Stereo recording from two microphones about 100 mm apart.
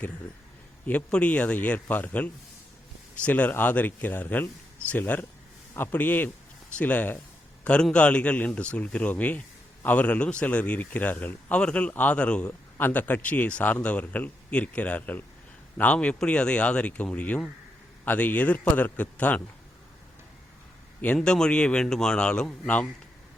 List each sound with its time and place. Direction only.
0.9 s a man's voice: 15° left (ahead or behind)
21.2 s a man's voice: 5° left (ahead or behind)